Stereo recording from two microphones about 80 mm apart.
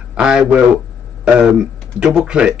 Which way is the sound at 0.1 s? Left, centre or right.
Centre.